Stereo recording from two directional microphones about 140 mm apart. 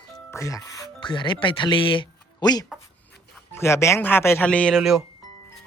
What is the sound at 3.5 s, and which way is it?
Speech, 20° left (ahead or behind).